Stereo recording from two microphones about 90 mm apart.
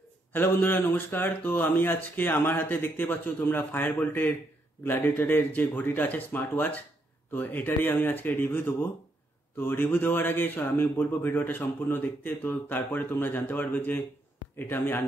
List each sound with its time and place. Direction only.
0.3 s speech: 25° left (ahead or behind)